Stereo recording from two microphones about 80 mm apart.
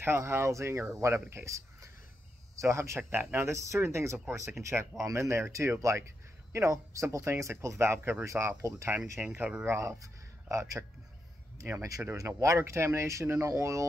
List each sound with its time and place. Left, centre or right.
0.0 s speech: right
9.4 s speech: centre
9.7 s speech: right
12.2 s speech: right